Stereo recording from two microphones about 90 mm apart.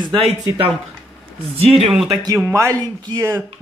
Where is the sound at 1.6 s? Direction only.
90° right.